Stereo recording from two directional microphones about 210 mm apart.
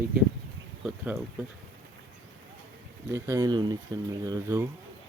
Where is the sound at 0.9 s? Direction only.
5° right (ahead or behind).